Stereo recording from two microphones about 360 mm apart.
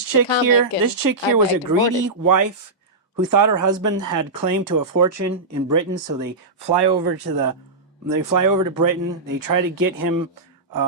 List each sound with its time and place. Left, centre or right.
0.1 s speech: right
8.0 s speech: right